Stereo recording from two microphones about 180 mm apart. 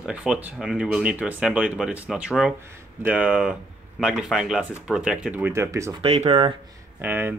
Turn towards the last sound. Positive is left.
turn(degrees=-10)  # may be behind; listen again after turning